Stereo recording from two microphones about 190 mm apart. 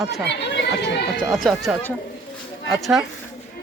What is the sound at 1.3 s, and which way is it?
Speech, centre (ahead or behind).